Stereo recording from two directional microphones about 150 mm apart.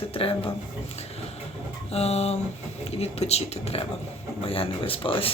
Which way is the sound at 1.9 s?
45° left (ahead or behind).